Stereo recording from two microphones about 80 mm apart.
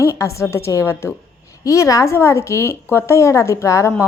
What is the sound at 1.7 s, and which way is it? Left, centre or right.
A woman's voice, left.